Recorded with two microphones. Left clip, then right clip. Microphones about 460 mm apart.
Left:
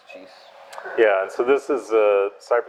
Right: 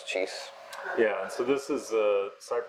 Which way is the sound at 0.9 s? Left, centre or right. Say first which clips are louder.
Left 10 dB; left.